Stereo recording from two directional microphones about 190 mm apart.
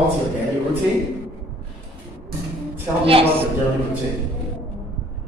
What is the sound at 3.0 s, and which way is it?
Speech, 30° right (ahead or behind).